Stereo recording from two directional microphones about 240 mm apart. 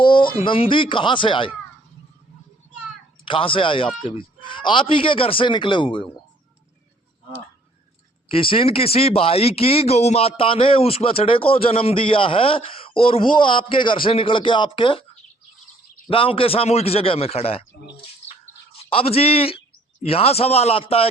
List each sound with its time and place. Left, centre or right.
0.0 s speech: centre
3.2 s speech: left
8.3 s speech: left
16.0 s speech: left
18.8 s a man's voice: left